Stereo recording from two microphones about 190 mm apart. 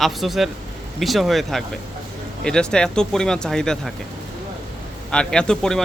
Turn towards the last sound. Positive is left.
turn(degrees=5)  # may be behind; listen again after turning